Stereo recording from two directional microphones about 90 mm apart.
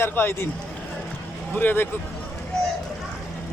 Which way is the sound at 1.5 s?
20° left (ahead or behind).